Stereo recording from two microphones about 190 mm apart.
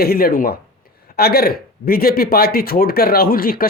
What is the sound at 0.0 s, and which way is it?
Speech, 55° left (ahead or behind).